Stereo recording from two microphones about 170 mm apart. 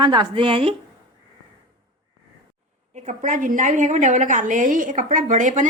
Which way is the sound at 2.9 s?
45° right (ahead or behind).